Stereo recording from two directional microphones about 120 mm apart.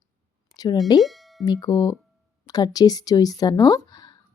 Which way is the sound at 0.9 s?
Centre (ahead or behind).